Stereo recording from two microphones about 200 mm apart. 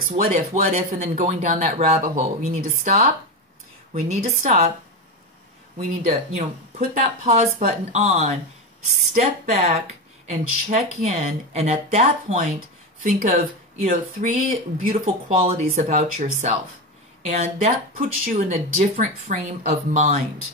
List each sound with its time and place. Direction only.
0.2 s speech: 35° right (ahead or behind)
6.0 s speech: 45° right (ahead or behind)